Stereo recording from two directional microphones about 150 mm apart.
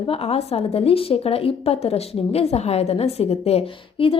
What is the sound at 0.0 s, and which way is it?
A woman's voice, 40° left (ahead or behind).